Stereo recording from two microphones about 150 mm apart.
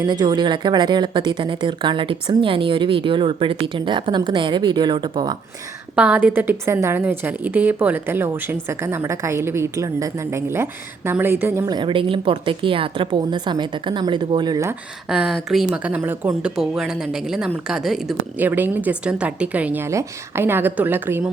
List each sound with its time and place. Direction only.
0.0 s speech: 30° right (ahead or behind)
6.0 s a woman's voice: 10° right (ahead or behind)
11.7 s speech: 35° right (ahead or behind)
15.1 s a woman's voice: 5° right (ahead or behind)
18.4 s a woman's voice: 10° right (ahead or behind)